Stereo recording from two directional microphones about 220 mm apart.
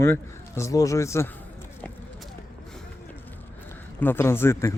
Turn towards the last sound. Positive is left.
turn(degrees=10)  # may be behind; listen again after turning